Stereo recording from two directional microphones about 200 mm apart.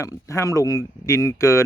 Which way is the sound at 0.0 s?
15° left (ahead or behind).